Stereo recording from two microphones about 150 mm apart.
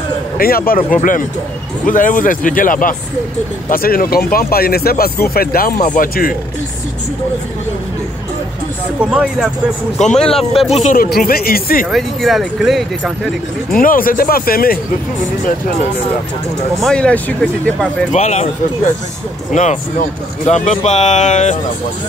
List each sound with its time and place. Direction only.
0.4 s speech: 80° left
1.9 s speech: 65° left (ahead or behind)
3.7 s speech: 75° left (ahead or behind)
9.0 s speech: 5° right (ahead or behind)
10.7 s speech: 50° left (ahead or behind)
11.0 s speech: 85° left
11.9 s speech: centre (ahead or behind)
13.7 s speech: 70° left (ahead or behind)
16.8 s speech: 5° left (ahead or behind)
18.1 s speech: 50° left (ahead or behind)
19.5 s speech: 55° left (ahead or behind)